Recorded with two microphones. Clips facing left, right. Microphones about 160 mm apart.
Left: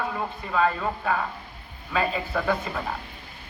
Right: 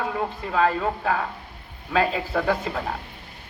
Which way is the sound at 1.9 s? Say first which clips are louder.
Right 3 dB; 90° right.